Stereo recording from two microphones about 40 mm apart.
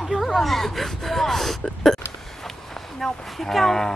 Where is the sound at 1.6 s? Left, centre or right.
Centre.